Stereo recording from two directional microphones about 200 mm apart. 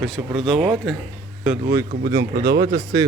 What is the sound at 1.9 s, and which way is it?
Speech, 60° right (ahead or behind).